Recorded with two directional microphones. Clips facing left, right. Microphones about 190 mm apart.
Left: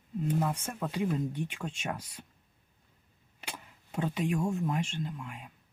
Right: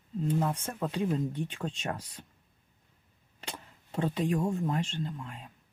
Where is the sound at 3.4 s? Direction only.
10° left (ahead or behind).